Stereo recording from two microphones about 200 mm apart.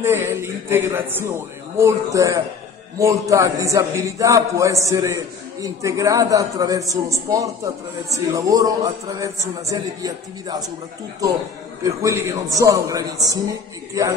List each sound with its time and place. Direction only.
0.0 s a man's voice: 10° right (ahead or behind)
11.8 s a man's voice: 15° right (ahead or behind)